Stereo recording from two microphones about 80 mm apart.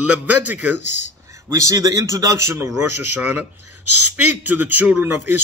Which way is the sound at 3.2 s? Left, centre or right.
Right.